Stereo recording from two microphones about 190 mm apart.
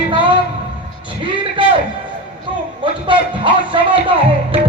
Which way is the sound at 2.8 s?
25° right (ahead or behind).